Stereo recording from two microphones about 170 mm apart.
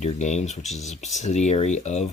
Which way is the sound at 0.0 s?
45° left (ahead or behind).